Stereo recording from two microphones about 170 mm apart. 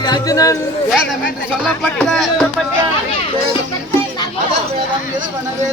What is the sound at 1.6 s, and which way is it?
Speech, centre (ahead or behind).